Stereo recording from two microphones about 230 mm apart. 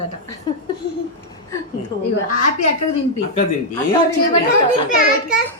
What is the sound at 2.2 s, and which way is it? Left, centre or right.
Speech, left.